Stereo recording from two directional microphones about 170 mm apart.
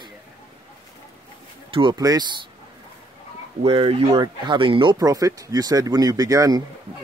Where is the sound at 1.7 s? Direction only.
25° right (ahead or behind).